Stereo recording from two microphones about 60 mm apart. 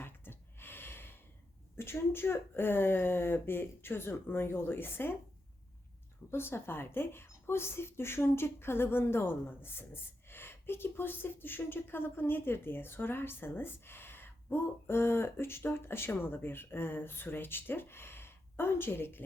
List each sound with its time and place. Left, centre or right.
0.0 s gasp: left
1.7 s speech: left
6.3 s speech: left